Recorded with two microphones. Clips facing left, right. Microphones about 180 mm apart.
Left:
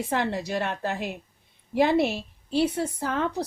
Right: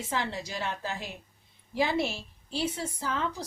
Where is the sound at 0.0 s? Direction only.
60° left (ahead or behind).